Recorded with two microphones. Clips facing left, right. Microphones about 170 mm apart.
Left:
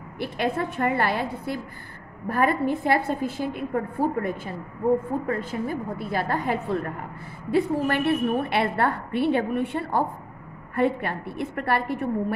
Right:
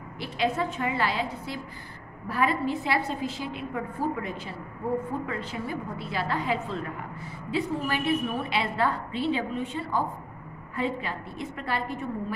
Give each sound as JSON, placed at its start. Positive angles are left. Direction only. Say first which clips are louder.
{"t": 0.2, "sound": "a woman's voice", "louder": "left 2 dB", "side_deg": 55}